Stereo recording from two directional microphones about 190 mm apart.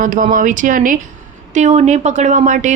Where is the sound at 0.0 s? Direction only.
45° right (ahead or behind).